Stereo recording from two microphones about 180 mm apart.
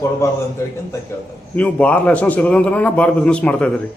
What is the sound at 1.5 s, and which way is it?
A man's voice, 10° left (ahead or behind).